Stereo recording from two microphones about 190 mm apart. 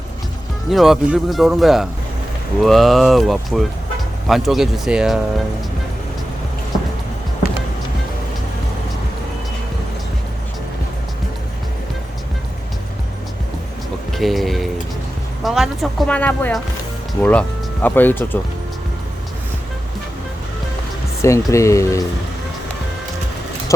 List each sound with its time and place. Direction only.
0.7 s speech: centre (ahead or behind)
14.1 s music: centre (ahead or behind)
15.4 s speech: centre (ahead or behind)
21.2 s speech: 15° left (ahead or behind)